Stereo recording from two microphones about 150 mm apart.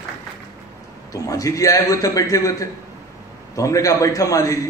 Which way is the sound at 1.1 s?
20° left (ahead or behind).